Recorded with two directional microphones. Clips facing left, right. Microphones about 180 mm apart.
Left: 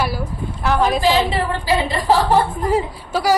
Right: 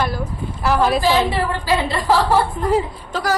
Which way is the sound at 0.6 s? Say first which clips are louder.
Right 1 dB; 5° right (ahead or behind).